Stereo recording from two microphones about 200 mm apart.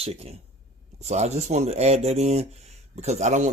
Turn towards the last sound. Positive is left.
turn(degrees=-35)  # may be behind; listen again after turning